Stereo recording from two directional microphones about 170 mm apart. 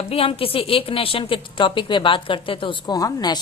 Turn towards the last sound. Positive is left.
turn(degrees=25)  # may be behind; listen again after turning